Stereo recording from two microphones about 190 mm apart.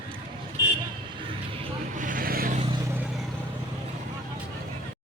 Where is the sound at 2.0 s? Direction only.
45° right (ahead or behind).